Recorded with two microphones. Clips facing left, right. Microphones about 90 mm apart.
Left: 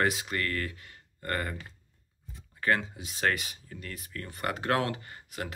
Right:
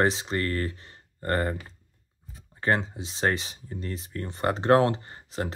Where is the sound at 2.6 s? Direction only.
30° right (ahead or behind).